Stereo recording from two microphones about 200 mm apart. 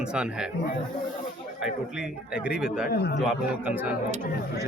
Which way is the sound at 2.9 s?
55° left (ahead or behind).